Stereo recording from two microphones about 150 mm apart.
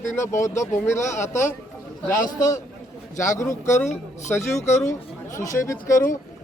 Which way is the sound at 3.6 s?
50° left (ahead or behind).